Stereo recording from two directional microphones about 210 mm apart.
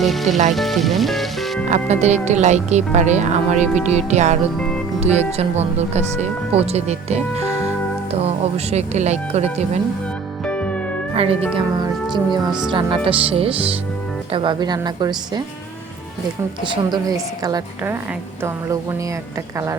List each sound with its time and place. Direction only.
0.0 s speech: centre (ahead or behind)
1.7 s speech: 30° right (ahead or behind)
4.5 s speech: 5° left (ahead or behind)
4.9 s music: 30° right (ahead or behind)
5.4 s speech: 30° right (ahead or behind)
8.2 s speech: 30° right (ahead or behind)
10.4 s music: 5° left (ahead or behind)
11.1 s a woman's voice: 25° right (ahead or behind)
16.6 s a woman's voice: 20° right (ahead or behind)